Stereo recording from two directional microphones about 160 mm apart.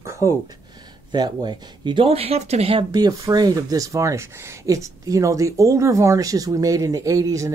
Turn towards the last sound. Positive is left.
turn(degrees=-20)  # may be behind; listen again after turning